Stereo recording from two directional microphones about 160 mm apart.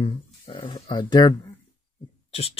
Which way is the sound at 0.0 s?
30° left (ahead or behind).